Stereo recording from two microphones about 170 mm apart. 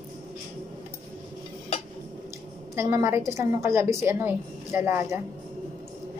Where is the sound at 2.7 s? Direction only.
15° right (ahead or behind).